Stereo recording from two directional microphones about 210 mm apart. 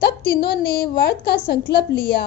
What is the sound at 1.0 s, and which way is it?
Speech, 50° left (ahead or behind).